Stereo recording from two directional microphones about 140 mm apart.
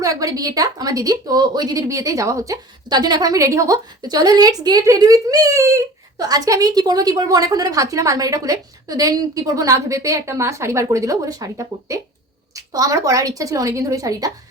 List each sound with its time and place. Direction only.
0.0 s speech: 25° right (ahead or behind)